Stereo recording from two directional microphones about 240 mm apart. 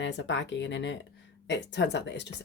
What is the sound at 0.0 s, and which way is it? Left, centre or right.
Speech, left.